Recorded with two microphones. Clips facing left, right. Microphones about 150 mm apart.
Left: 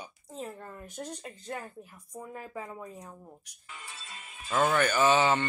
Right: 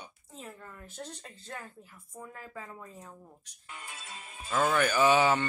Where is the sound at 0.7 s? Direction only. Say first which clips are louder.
Left 4 dB; 15° left (ahead or behind).